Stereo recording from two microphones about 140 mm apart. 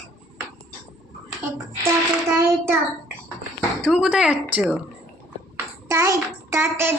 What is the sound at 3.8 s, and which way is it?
Speech, 5° right (ahead or behind).